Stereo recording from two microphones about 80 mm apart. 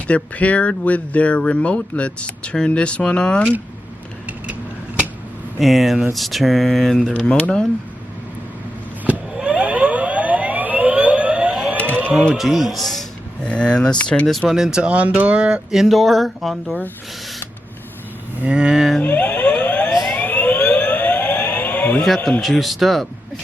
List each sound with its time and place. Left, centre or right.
0.1 s speech: centre
5.5 s speech: centre
7.1 s speech: centre
9.0 s vehicle: centre
12.3 s a sound: centre
13.5 s speech: centre
14.3 s speech: centre
18.4 s speech: centre
19.0 s a sound: centre
20.1 s siren: centre
22.0 s speech: centre